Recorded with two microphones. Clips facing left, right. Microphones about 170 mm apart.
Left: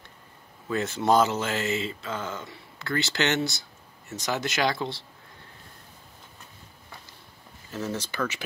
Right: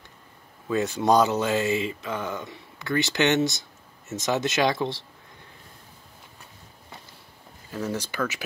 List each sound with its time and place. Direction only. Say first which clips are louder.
0.7 s speech: right 2 dB; 15° right (ahead or behind)
7.7 s speech: right 2 dB; 10° right (ahead or behind)